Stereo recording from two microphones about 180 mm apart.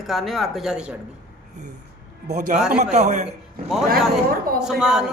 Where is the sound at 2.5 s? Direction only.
45° right (ahead or behind).